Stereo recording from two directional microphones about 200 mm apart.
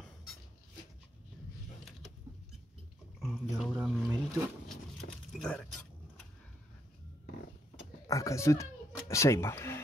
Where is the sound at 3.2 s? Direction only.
Centre (ahead or behind).